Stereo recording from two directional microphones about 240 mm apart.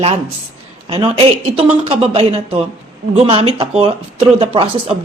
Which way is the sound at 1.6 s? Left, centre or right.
Right.